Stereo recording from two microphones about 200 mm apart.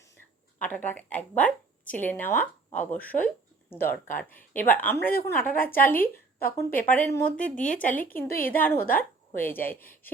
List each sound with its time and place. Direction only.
0.6 s a woman's voice: 10° left (ahead or behind)
4.9 s a woman's voice: 50° left (ahead or behind)
5.4 s a woman's voice: 10° left (ahead or behind)
6.7 s a woman's voice: 45° left (ahead or behind)
6.9 s a woman's voice: 10° left (ahead or behind)
7.6 s speech: 40° left (ahead or behind)
7.9 s a woman's voice: 10° left (ahead or behind)
8.3 s a woman's voice: 45° left (ahead or behind)
8.5 s a woman's voice: 10° left (ahead or behind)
8.8 s a woman's voice: 45° left (ahead or behind)
9.4 s a woman's voice: 10° left (ahead or behind)